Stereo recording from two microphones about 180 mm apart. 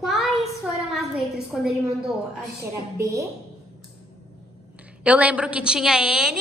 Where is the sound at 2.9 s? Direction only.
15° right (ahead or behind).